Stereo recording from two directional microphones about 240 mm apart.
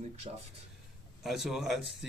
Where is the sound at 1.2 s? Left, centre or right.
Centre.